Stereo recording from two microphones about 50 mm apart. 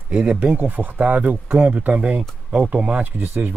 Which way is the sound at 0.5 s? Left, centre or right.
Right.